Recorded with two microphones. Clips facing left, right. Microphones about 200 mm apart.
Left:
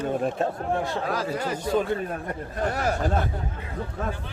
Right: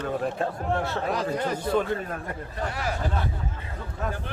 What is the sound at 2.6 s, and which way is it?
Speech, 45° left (ahead or behind).